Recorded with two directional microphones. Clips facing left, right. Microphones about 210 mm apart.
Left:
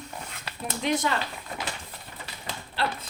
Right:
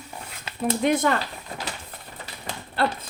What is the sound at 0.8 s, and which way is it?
Speech, 55° right (ahead or behind).